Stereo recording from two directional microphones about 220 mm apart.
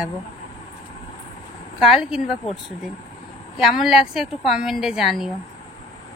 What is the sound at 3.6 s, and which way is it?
A woman's voice, centre (ahead or behind).